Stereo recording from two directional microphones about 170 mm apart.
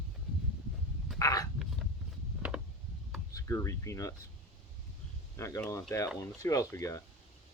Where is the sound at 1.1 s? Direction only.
20° left (ahead or behind).